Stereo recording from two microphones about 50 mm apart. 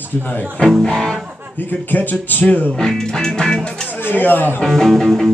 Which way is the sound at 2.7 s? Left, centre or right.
Centre.